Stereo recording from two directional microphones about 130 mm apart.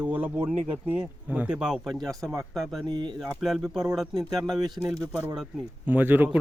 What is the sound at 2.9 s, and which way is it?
Speech, 35° right (ahead or behind).